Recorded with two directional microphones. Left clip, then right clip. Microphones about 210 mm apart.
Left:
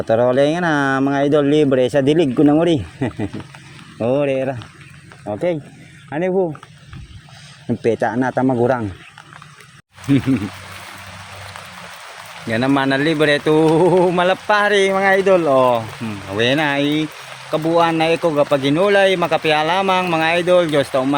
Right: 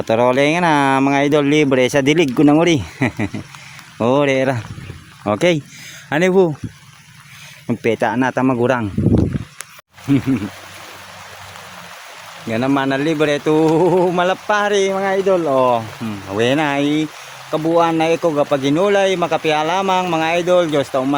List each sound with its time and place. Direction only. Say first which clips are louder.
0.0 s speech: even; 20° right (ahead or behind)
5.3 s speech: right 5 dB; 50° right (ahead or behind)
7.8 s speech: right 1 dB; 25° right (ahead or behind)
8.3 s speech: even; 40° right (ahead or behind)
12.5 s speech: left 1 dB; 10° right (ahead or behind)